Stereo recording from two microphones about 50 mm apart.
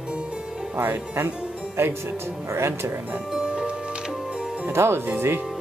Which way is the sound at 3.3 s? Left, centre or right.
Centre.